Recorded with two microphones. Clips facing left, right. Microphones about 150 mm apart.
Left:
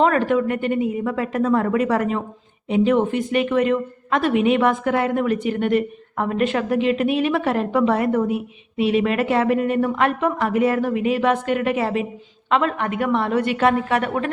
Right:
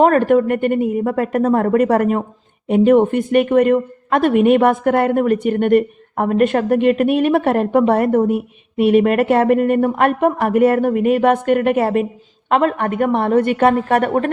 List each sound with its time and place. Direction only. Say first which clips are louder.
0.0 s a woman's voice: right 5 dB; 50° right (ahead or behind)